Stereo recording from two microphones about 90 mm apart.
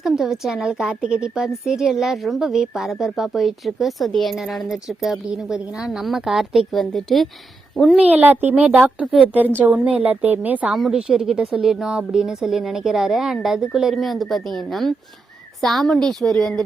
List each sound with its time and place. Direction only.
0.0 s a woman's voice: centre (ahead or behind)
7.9 s speech: 15° right (ahead or behind)
10.7 s a woman's voice: centre (ahead or behind)